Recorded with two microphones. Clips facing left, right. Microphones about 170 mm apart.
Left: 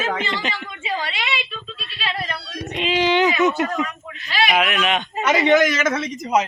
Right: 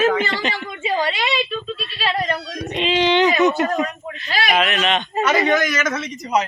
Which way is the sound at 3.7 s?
40° right (ahead or behind).